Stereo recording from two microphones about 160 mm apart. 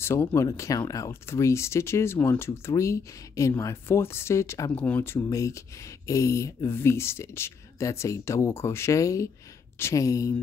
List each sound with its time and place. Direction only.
0.0 s speech: 15° left (ahead or behind)